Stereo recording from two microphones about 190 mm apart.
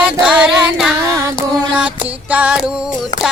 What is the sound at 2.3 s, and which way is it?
Music, 5° right (ahead or behind).